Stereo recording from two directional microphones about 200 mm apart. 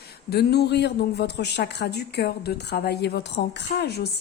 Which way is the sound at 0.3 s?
55° left (ahead or behind).